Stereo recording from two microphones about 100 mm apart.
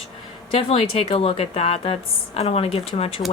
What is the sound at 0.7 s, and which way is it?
A woman's voice, 75° left (ahead or behind).